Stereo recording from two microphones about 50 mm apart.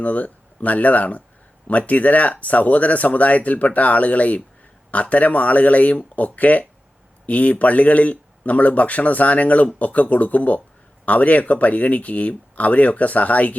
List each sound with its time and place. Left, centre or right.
0.0 s speech: left